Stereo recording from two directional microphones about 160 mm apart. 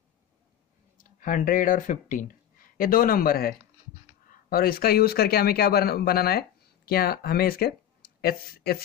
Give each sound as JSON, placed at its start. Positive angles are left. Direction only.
{"t": 1.2, "sound": "speech", "side_deg": 55}